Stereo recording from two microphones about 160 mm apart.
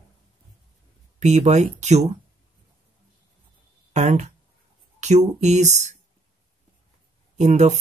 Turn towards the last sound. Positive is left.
turn(degrees=-45)  # may be behind; listen again after turning